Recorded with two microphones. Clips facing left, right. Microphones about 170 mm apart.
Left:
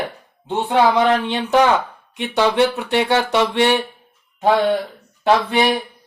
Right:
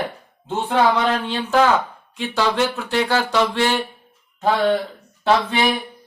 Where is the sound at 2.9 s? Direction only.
20° left (ahead or behind).